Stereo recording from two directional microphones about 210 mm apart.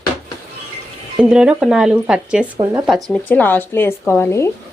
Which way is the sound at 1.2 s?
5° right (ahead or behind).